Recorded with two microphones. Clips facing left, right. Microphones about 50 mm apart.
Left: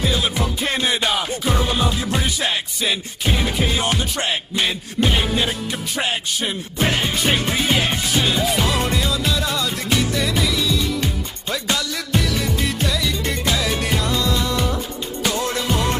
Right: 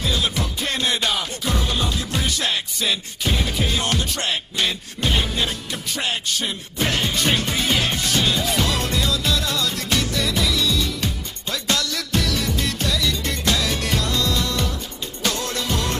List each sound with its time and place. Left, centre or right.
0.0 s music: centre